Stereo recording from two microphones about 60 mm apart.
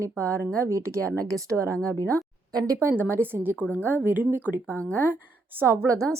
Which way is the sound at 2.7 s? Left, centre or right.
Right.